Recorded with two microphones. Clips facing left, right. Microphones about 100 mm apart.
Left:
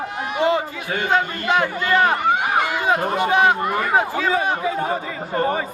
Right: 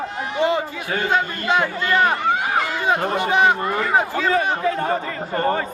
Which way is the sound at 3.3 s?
20° right (ahead or behind).